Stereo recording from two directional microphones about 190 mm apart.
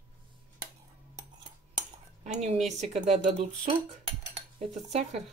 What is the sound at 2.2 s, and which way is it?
A woman's voice, 35° right (ahead or behind).